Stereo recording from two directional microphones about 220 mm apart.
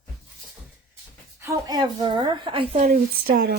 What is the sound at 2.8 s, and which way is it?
Speech, 40° right (ahead or behind).